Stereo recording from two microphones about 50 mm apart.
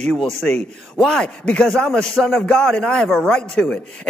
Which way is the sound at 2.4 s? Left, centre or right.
Centre.